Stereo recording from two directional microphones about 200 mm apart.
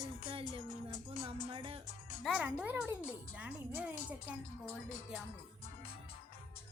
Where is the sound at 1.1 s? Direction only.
30° right (ahead or behind).